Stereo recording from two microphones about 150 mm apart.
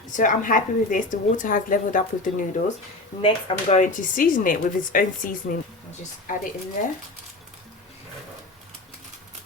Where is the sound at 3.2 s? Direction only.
35° left (ahead or behind).